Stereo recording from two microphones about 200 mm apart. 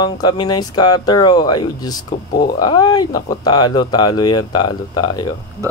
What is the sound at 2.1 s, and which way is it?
Speech, 45° left (ahead or behind).